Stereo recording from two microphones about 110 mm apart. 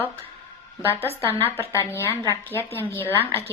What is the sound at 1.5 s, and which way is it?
Speech, 20° left (ahead or behind).